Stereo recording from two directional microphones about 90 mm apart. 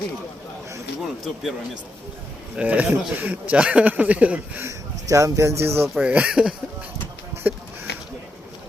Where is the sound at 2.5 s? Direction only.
15° right (ahead or behind).